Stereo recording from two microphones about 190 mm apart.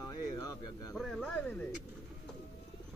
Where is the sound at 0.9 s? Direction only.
Centre (ahead or behind).